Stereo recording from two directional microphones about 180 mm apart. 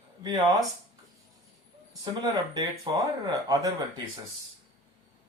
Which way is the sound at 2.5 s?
20° right (ahead or behind).